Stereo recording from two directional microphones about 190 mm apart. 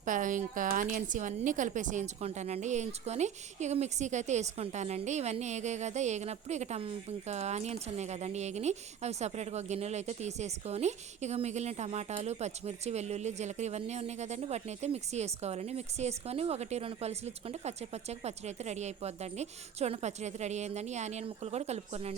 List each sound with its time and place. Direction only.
0.0 s a woman's voice: 45° right (ahead or behind)